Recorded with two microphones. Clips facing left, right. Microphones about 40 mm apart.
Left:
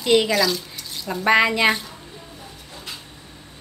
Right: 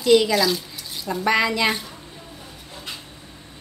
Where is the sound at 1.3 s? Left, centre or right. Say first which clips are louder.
Left 3 dB; left.